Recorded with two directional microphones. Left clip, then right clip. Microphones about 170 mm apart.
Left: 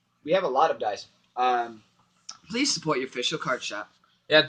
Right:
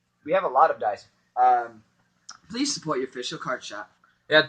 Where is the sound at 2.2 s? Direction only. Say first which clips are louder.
Left 2 dB; 10° left (ahead or behind).